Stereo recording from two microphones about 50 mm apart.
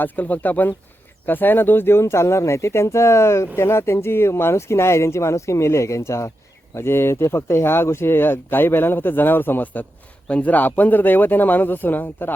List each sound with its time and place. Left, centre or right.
0.0 s speech: left
2.0 s speech: left
6.7 s speech: left
10.2 s speech: left